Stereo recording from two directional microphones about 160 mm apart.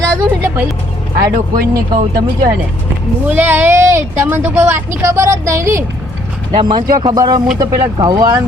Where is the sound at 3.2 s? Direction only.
15° right (ahead or behind).